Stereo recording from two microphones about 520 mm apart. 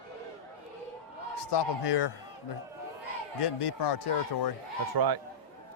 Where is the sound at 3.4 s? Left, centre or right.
Left.